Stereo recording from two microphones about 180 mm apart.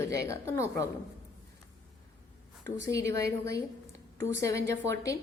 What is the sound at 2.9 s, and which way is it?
Speech, 15° left (ahead or behind).